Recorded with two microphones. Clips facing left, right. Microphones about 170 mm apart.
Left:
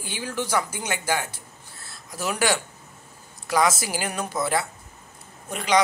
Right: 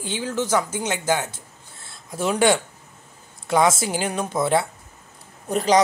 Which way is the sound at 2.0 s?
25° right (ahead or behind).